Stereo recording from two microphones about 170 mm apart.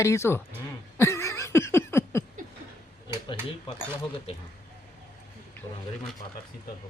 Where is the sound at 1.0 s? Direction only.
15° left (ahead or behind).